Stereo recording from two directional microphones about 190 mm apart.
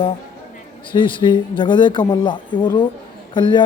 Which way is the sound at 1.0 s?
25° left (ahead or behind).